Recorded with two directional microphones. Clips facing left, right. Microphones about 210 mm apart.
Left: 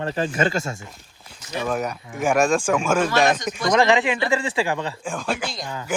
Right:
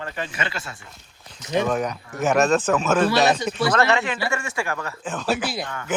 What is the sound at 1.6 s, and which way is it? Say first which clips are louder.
Speech: right 1 dB; 5° left (ahead or behind).